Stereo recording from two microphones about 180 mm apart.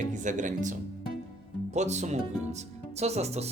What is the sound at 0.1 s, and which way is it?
Speech, 45° right (ahead or behind).